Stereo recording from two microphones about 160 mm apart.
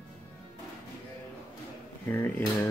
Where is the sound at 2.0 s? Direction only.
10° left (ahead or behind).